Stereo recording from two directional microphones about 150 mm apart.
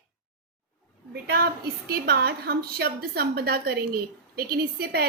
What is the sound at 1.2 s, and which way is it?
A woman's voice, 90° right.